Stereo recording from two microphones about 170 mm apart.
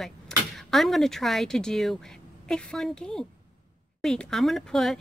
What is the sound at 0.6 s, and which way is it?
Speech, centre (ahead or behind).